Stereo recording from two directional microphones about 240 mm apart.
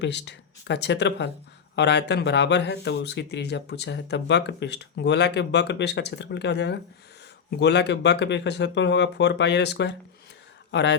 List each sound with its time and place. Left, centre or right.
0.0 s speech: left